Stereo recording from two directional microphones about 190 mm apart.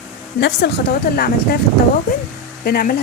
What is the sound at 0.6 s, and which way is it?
Speech, 65° left (ahead or behind).